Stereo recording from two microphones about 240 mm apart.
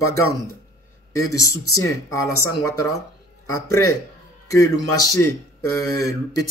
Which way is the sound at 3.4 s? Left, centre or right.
Centre.